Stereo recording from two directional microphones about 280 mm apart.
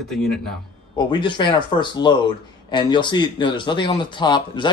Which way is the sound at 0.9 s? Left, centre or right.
Centre.